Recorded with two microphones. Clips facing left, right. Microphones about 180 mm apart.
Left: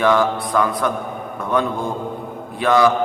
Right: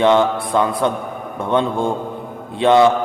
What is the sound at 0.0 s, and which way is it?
A man's voice, 25° right (ahead or behind).